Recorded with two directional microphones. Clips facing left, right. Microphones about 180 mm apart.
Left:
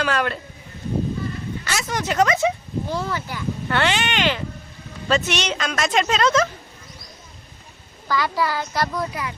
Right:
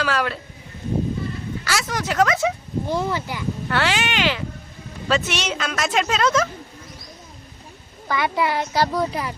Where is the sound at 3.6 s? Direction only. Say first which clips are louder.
Left 1 dB; 5° right (ahead or behind).